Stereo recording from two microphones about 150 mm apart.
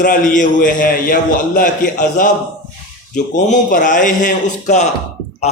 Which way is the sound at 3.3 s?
60° left (ahead or behind).